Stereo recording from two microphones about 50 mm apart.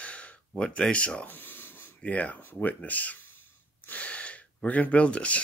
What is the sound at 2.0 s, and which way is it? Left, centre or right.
Speech, left.